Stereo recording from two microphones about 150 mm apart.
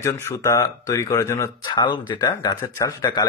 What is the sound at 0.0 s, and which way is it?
Speech, 20° left (ahead or behind).